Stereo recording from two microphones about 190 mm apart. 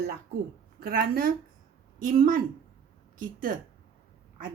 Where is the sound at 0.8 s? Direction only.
50° right (ahead or behind).